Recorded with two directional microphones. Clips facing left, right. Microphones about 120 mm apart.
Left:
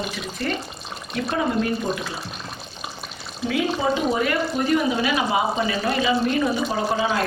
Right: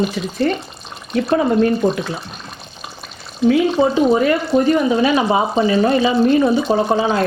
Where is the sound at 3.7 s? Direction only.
35° right (ahead or behind).